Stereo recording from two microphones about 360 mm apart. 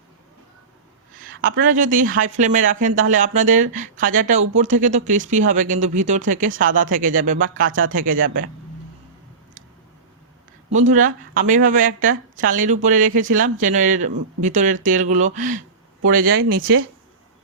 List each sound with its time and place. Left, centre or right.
1.2 s speech: right
10.7 s speech: centre